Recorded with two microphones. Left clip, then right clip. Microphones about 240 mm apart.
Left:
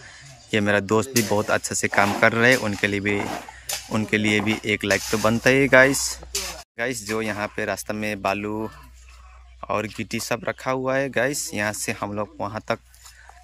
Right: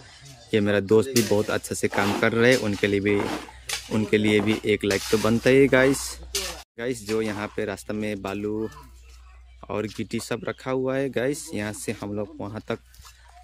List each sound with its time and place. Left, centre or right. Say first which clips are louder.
0.5 s speech: even; centre